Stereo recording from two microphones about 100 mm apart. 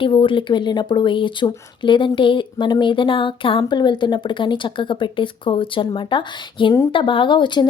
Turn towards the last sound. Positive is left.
turn(degrees=50)  # may be behind; listen again after turning